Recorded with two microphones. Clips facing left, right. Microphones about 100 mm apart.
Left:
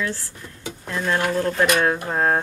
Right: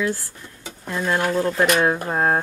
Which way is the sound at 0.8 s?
10° right (ahead or behind).